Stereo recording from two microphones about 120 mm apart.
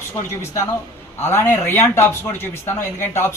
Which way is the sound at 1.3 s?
20° left (ahead or behind).